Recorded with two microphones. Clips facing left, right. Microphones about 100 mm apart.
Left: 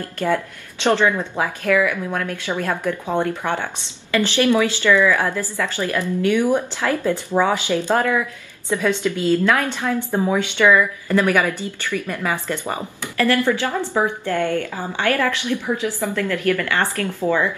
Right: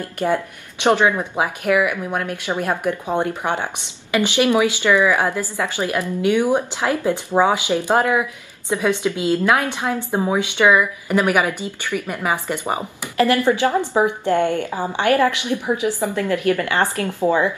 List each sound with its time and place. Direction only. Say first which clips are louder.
0.0 s speech: right 1 dB; 15° right (ahead or behind)